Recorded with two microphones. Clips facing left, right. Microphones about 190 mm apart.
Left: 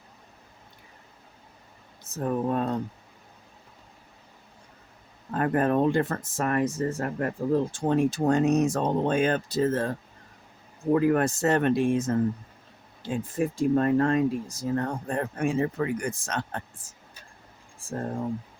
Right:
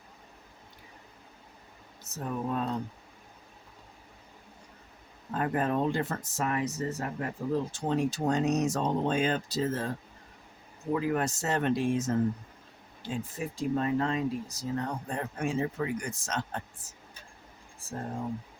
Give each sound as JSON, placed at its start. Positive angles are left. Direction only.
{"t": 2.2, "sound": "speech", "side_deg": 50}
{"t": 5.3, "sound": "speech", "side_deg": 55}
{"t": 10.9, "sound": "speech", "side_deg": 55}